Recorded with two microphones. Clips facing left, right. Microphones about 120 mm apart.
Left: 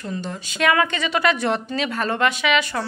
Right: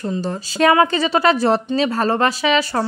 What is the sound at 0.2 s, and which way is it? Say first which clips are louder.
A woman's voice: right 6 dB; 35° right (ahead or behind).